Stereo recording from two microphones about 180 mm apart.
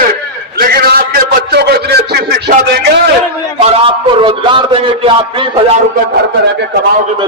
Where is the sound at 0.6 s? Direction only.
55° right (ahead or behind).